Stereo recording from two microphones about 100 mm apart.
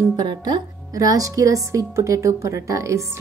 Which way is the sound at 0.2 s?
45° right (ahead or behind).